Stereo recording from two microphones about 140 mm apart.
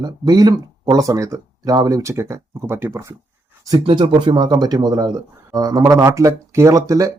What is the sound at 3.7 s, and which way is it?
Speech, 35° right (ahead or behind).